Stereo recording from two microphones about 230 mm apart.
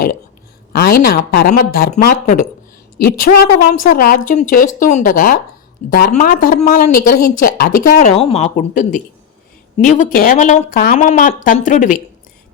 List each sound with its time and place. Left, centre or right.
0.7 s speech: left